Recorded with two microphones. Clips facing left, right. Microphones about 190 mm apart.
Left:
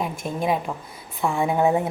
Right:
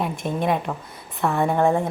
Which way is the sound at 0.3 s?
5° left (ahead or behind).